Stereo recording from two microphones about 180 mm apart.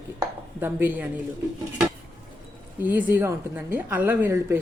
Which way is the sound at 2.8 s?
10° right (ahead or behind).